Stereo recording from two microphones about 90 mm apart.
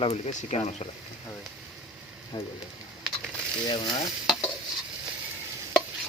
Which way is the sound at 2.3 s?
70° left (ahead or behind).